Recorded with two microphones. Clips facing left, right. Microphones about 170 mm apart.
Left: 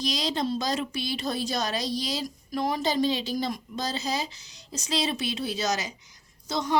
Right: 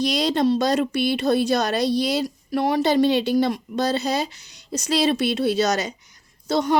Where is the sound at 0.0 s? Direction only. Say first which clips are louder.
Right 8 dB; 65° right (ahead or behind).